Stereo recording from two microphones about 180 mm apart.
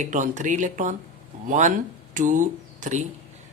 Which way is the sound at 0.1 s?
45° right (ahead or behind).